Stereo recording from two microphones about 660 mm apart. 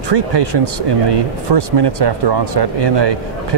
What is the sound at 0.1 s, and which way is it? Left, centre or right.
Speech, right.